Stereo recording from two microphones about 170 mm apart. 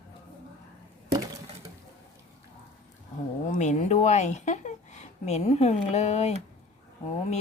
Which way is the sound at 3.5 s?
45° left (ahead or behind).